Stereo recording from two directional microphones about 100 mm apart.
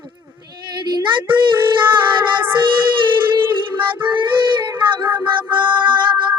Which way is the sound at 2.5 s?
55° right (ahead or behind).